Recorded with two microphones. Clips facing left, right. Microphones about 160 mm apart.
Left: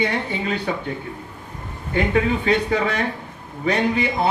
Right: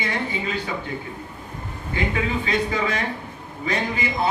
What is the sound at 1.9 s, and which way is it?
A man's voice, 65° left (ahead or behind).